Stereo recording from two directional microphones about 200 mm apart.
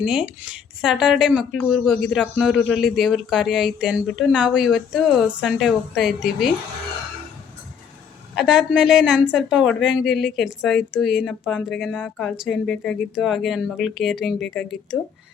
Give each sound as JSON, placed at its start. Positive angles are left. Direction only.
{"t": 0.0, "sound": "speech", "side_deg": -5}
{"t": 8.4, "sound": "speech", "side_deg": -5}